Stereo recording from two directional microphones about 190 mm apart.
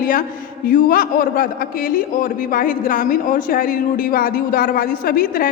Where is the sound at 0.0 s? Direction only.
45° left (ahead or behind).